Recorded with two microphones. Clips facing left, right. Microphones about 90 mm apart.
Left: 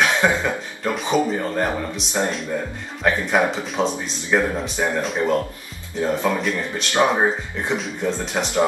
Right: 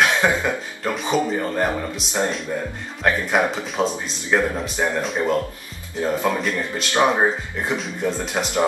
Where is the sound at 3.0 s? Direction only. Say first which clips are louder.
Left 1 dB; centre (ahead or behind).